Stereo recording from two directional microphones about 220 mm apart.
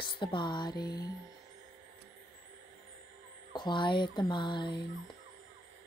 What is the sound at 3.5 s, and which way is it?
Speech, 20° left (ahead or behind).